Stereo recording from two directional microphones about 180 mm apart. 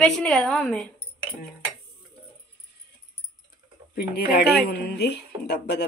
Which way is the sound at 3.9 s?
60° left (ahead or behind).